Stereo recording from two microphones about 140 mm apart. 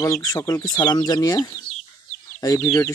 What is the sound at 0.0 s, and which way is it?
Speech, 25° left (ahead or behind).